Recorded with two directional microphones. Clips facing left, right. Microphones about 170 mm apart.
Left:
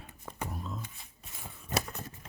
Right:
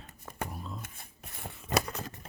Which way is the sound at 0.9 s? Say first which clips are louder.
Right 3 dB; 55° right (ahead or behind).